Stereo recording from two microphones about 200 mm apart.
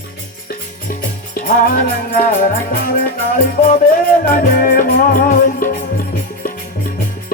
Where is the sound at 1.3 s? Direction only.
45° left (ahead or behind).